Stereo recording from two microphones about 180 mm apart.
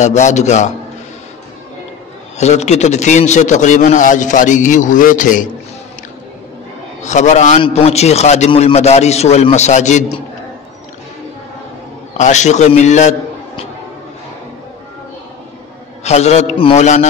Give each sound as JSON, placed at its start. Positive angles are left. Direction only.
{"t": 0.0, "sound": "a man's voice", "side_deg": 40}
{"t": 2.3, "sound": "a man's voice", "side_deg": 40}
{"t": 7.0, "sound": "a man's voice", "side_deg": 40}
{"t": 12.2, "sound": "a man's voice", "side_deg": 40}
{"t": 16.0, "sound": "a man's voice", "side_deg": 40}